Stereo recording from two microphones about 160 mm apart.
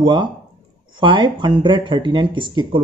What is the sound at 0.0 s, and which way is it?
A man's voice, 30° right (ahead or behind).